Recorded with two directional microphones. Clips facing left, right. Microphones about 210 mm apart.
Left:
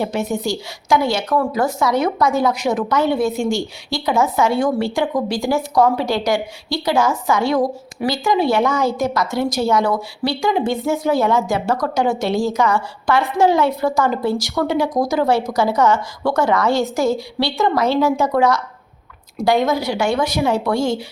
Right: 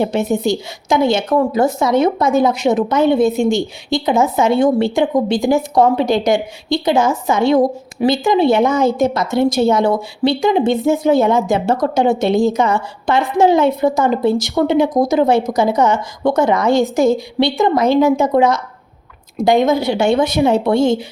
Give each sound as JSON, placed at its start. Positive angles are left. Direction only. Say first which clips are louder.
{"t": 0.0, "sound": "a woman's voice", "louder": "right 5 dB", "side_deg": -20}